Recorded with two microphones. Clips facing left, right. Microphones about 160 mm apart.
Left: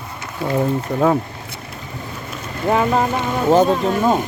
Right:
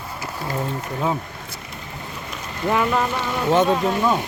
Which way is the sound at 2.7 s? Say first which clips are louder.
Left 3 dB; 35° left (ahead or behind).